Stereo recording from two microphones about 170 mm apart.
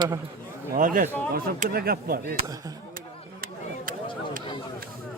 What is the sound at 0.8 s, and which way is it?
Speech, 50° right (ahead or behind).